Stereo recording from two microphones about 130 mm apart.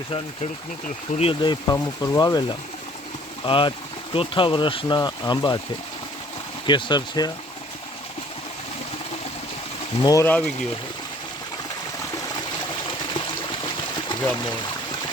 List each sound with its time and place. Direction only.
1.2 s speech: 40° left (ahead or behind)
3.4 s speech: 40° left (ahead or behind)
6.7 s speech: 35° left (ahead or behind)
10.0 s speech: 30° left (ahead or behind)
10.2 s speech: 10° left (ahead or behind)